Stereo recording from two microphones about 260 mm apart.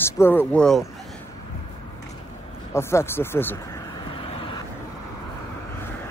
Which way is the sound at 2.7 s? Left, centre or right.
Centre.